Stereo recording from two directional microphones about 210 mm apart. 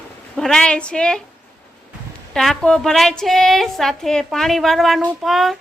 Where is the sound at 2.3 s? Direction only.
5° left (ahead or behind).